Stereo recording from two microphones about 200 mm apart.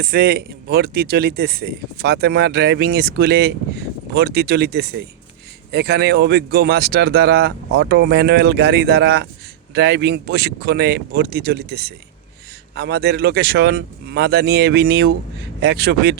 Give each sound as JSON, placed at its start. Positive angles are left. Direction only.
{"t": 0.0, "sound": "speech", "side_deg": -50}